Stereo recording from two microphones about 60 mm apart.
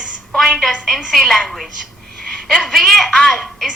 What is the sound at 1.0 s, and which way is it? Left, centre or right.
A woman's voice, centre.